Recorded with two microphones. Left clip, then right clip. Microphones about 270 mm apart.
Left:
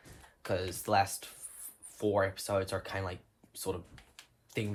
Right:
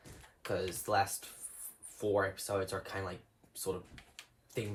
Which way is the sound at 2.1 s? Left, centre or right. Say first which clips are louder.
Left 2 dB; left.